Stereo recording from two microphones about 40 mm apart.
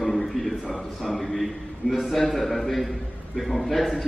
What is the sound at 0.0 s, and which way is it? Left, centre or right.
A man's voice, centre.